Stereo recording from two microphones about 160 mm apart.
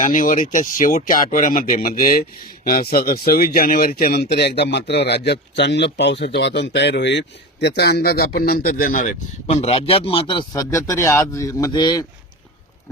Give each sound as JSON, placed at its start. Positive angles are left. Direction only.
{"t": 0.0, "sound": "speech", "side_deg": 55}
{"t": 10.5, "sound": "speech", "side_deg": 20}